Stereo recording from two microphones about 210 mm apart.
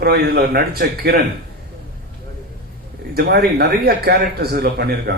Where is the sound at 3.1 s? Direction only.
50° right (ahead or behind).